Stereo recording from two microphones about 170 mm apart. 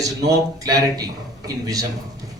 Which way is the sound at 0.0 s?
20° right (ahead or behind).